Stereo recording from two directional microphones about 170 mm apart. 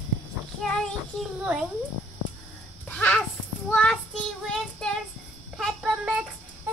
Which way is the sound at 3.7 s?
5° left (ahead or behind).